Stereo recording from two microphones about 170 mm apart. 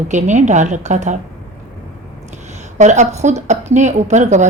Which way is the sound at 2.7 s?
45° right (ahead or behind).